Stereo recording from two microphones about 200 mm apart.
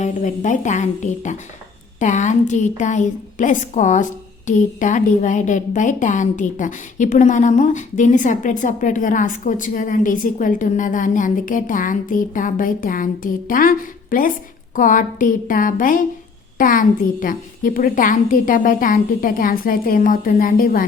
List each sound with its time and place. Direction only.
0.0 s a woman's voice: 40° left (ahead or behind)